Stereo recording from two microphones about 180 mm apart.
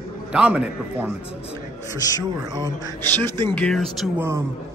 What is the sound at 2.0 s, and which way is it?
Speech, 20° left (ahead or behind).